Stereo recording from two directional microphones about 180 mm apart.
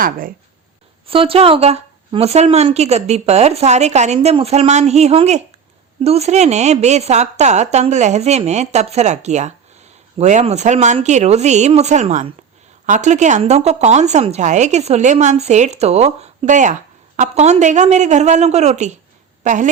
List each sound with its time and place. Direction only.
0.0 s speech: 50° right (ahead or behind)
1.0 s a woman's voice: 30° right (ahead or behind)